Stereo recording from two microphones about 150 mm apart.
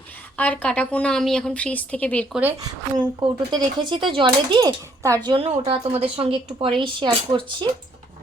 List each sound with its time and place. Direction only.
0.3 s a woman's voice: 10° left (ahead or behind)
2.3 s speech: 10° right (ahead or behind)
3.2 s speech: 30° right (ahead or behind)
5.3 s speech: 40° right (ahead or behind)